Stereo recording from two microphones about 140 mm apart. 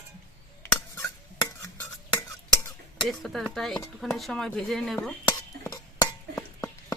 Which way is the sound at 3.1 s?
5° left (ahead or behind).